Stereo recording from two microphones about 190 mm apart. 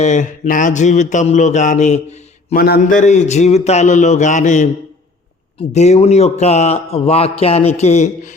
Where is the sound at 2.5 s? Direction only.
50° left (ahead or behind).